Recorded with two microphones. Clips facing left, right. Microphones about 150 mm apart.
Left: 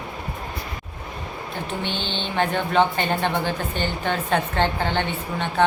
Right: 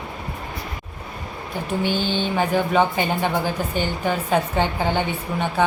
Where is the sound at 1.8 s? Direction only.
10° right (ahead or behind).